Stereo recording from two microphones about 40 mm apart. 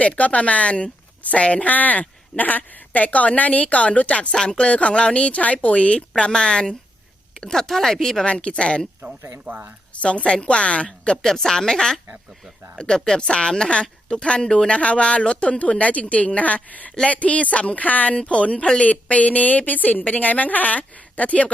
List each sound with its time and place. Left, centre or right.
0.0 s speech: left; by 8.2 s centre
8.2 s speech: left
9.5 s speech: right
9.9 s speech: left
11.2 s speech: centre; by 18.2 s left
18.2 s speech: left